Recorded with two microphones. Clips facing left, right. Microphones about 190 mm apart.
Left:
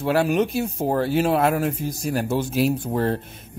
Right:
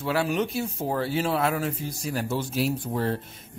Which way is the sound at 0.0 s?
45° left (ahead or behind).